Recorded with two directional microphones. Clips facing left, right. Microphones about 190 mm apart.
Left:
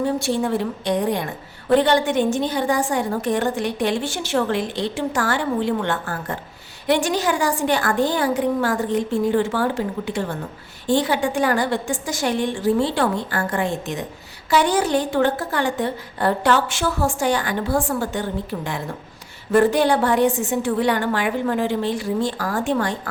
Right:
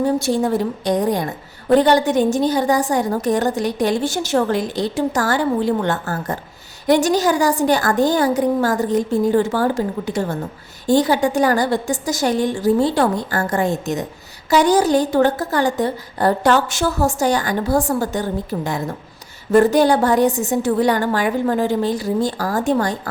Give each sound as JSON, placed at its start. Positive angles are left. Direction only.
{"t": 0.0, "sound": "a woman's voice", "side_deg": -40}